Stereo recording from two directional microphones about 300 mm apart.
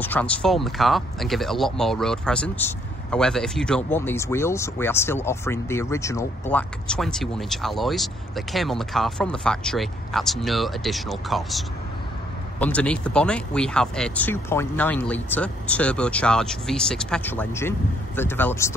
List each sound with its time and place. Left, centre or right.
0.0 s speech: centre